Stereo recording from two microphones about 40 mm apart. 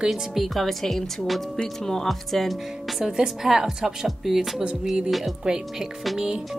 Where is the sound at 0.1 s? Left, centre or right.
Centre.